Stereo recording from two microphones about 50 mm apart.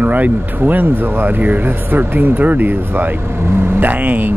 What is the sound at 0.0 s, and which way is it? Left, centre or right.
Speech, right.